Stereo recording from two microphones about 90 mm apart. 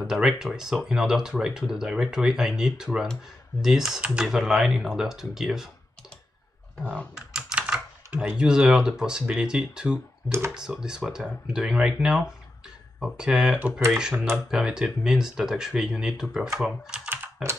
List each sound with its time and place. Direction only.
0.0 s speech: 5° right (ahead or behind)
7.2 s typing: 10° right (ahead or behind)
8.4 s speech: 10° right (ahead or behind)
14.1 s speech: 25° right (ahead or behind)
14.5 s speech: 5° right (ahead or behind)
17.1 s typing: 30° right (ahead or behind)